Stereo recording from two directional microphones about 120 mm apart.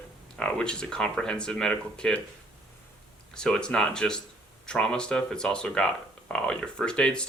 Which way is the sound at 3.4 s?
5° left (ahead or behind).